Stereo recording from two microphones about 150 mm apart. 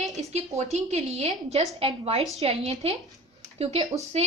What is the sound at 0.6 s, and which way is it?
A woman's voice, 45° right (ahead or behind).